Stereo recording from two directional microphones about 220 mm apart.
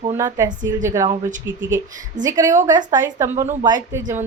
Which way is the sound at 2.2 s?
15° right (ahead or behind).